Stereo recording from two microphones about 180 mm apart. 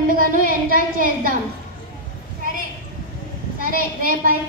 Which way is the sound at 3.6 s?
50° right (ahead or behind).